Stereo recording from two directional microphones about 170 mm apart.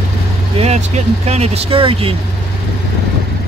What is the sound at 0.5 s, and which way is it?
Speech, 40° right (ahead or behind).